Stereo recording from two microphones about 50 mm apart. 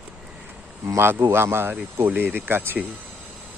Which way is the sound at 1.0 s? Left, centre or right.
Right.